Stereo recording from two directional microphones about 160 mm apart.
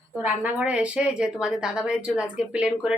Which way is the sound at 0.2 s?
10° right (ahead or behind).